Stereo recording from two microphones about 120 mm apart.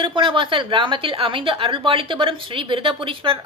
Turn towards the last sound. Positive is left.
turn(degrees=-45)  # may be behind; listen again after turning